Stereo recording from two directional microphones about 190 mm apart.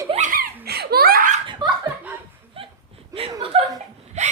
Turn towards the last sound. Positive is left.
turn(degrees=-35)  # may be behind; listen again after turning